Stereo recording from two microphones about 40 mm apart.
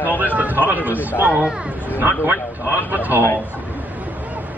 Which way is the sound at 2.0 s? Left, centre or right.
Right.